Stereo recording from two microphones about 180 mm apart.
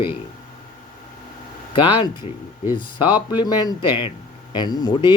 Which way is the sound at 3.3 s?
25° left (ahead or behind).